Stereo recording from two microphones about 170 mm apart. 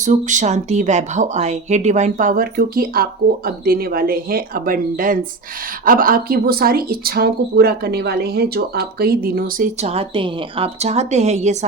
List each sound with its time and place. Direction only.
0.0 s speech: 45° right (ahead or behind)
9.8 s a woman's voice: 35° right (ahead or behind)